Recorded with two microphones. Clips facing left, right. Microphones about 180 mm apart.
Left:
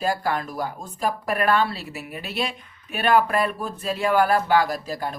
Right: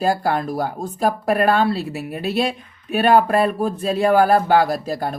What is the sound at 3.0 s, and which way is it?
Speech, 35° right (ahead or behind).